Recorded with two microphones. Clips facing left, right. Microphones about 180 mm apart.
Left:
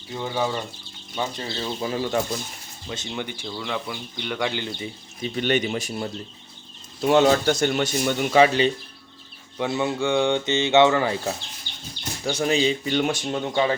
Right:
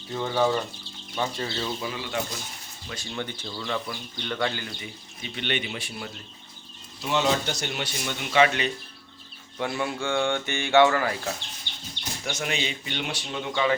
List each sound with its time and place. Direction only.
0.1 s speech: 10° left (ahead or behind)
1.4 s speech: 25° left (ahead or behind)
1.9 s speech: 40° left (ahead or behind)
2.9 s speech: 20° left (ahead or behind)
4.6 s speech: 30° left (ahead or behind)
9.6 s speech: 20° left (ahead or behind)